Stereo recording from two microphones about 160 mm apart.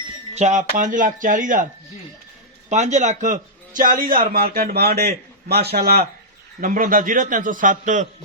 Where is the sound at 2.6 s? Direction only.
50° right (ahead or behind); by 6.0 s 80° right.